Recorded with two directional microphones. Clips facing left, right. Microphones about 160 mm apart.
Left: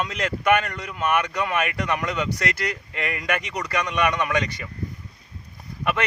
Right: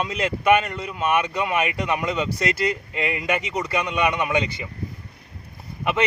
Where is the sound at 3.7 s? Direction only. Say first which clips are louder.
Even; 10° right (ahead or behind).